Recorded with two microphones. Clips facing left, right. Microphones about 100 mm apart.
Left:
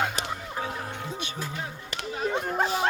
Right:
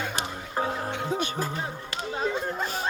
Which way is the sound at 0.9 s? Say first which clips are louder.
Right 6 dB; 70° right (ahead or behind).